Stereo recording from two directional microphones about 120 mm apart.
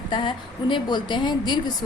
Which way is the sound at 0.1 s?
40° left (ahead or behind).